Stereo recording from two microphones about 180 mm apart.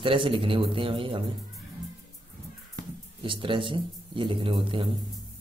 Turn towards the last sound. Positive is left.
turn(degrees=-30)  # may be behind; listen again after turning